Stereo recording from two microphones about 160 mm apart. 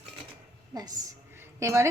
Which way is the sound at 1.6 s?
20° right (ahead or behind).